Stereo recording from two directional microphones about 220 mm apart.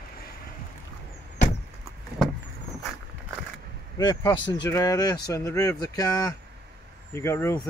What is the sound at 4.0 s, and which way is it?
Speech, 15° left (ahead or behind).